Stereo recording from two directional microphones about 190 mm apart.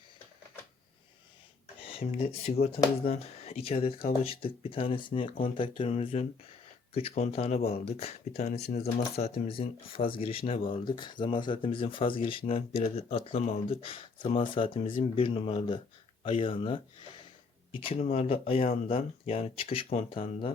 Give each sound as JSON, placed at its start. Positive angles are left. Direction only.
{"t": 1.8, "sound": "speech", "side_deg": 30}